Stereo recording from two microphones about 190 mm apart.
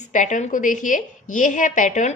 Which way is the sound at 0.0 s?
40° left (ahead or behind).